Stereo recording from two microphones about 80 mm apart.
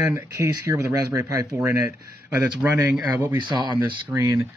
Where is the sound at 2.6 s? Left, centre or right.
Centre.